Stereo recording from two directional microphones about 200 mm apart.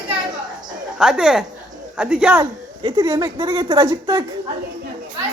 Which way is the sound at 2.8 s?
20° right (ahead or behind).